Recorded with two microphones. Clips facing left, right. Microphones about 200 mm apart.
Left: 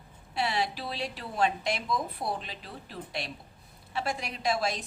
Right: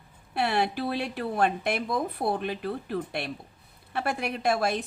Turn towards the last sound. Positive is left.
turn(degrees=-55)  # may be behind; listen again after turning